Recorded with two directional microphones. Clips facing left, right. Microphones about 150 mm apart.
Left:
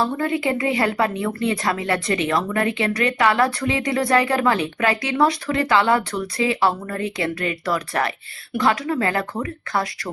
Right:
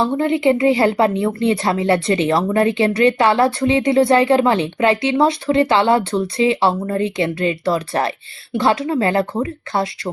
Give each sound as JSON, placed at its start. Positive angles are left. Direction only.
{"t": 0.0, "sound": "speech", "side_deg": -25}